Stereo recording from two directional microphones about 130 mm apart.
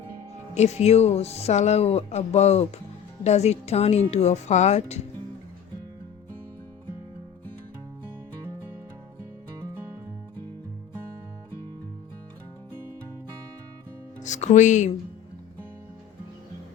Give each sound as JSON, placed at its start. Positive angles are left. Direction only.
{"t": 0.5, "sound": "speech", "side_deg": 55}
{"t": 14.2, "sound": "music", "side_deg": 65}